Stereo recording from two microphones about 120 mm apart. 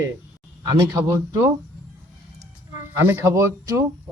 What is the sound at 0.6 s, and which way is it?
Speech, 35° right (ahead or behind).